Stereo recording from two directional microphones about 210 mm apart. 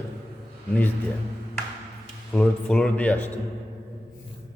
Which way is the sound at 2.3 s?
5° left (ahead or behind).